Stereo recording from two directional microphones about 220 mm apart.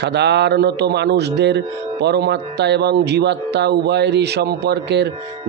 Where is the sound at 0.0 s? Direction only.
50° right (ahead or behind).